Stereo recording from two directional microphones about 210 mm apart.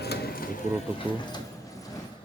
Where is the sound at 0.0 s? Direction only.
45° left (ahead or behind).